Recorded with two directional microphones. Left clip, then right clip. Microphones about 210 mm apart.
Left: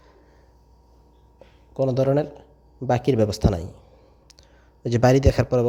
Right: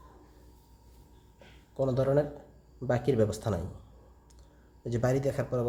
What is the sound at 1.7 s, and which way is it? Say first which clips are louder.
A man's voice: left 6 dB; 35° left (ahead or behind).